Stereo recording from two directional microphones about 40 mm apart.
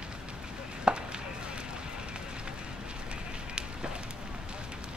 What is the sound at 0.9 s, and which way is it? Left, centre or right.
Chopping, right.